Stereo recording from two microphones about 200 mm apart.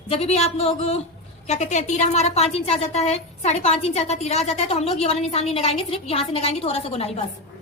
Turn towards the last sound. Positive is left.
turn(degrees=30)  # may be behind; listen again after turning